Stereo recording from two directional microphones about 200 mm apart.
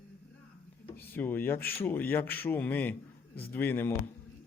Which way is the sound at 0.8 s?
10° left (ahead or behind).